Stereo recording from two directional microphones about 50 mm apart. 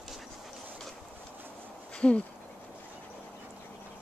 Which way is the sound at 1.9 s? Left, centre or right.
Left.